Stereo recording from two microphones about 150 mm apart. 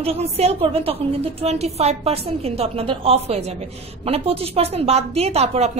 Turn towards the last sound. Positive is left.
turn(degrees=-45)  # may be behind; listen again after turning